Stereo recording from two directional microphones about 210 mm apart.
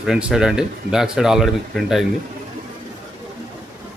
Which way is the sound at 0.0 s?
5° right (ahead or behind).